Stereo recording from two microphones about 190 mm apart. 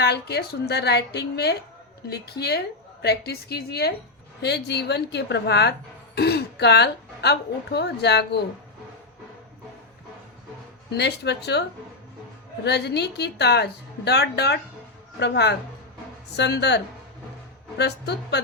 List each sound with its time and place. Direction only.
0.0 s a woman's voice: 60° left (ahead or behind)
10.9 s a woman's voice: 60° left (ahead or behind)
12.6 s a woman's voice: 60° left (ahead or behind)